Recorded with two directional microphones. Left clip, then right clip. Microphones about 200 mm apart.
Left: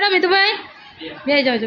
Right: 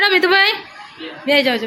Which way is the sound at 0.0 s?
Centre (ahead or behind).